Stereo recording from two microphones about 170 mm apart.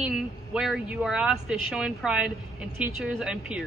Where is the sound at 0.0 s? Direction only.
5° right (ahead or behind).